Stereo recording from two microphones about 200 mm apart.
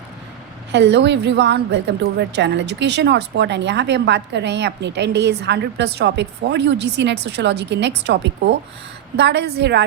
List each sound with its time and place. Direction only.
0.7 s a woman's voice: 60° right (ahead or behind)